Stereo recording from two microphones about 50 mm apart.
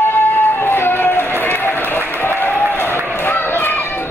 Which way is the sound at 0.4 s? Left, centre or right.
Left.